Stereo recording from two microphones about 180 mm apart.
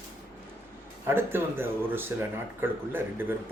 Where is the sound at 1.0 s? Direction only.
10° right (ahead or behind).